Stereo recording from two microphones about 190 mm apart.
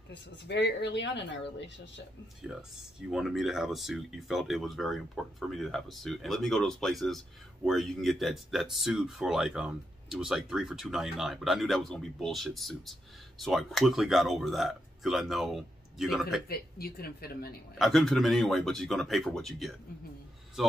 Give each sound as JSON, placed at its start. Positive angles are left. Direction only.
{"t": 0.1, "sound": "speech", "side_deg": 65}
{"t": 3.1, "sound": "speech", "side_deg": 0}
{"t": 16.4, "sound": "speech", "side_deg": 50}
{"t": 17.7, "sound": "speech", "side_deg": 0}